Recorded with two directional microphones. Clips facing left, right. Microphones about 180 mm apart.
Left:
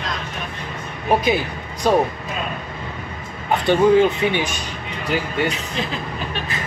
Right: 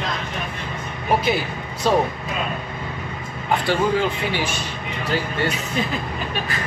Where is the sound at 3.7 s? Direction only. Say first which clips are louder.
Left 8 dB; 20° left (ahead or behind).